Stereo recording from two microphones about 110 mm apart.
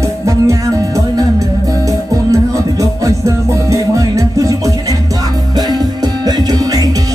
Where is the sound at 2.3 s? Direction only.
30° right (ahead or behind).